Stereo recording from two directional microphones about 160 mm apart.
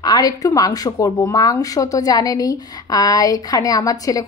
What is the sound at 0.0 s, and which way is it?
Speech, 25° left (ahead or behind).